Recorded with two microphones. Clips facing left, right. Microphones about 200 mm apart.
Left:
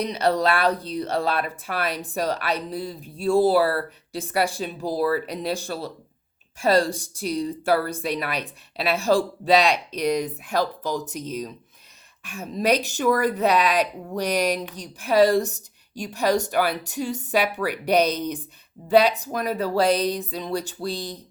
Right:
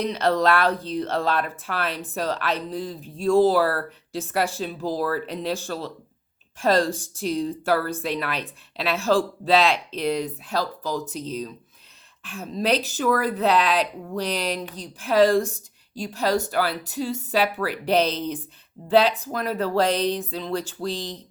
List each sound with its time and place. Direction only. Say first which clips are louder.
0.0 s speech: even; 15° left (ahead or behind)
12.2 s speech: left 2 dB; 10° left (ahead or behind)